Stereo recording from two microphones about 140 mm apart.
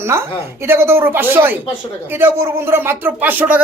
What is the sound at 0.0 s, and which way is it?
Speech, 20° right (ahead or behind).